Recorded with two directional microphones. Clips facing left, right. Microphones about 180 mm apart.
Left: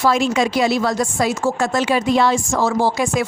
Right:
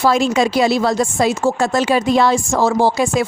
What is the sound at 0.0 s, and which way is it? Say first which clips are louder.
Speech: right 2 dB; 35° right (ahead or behind).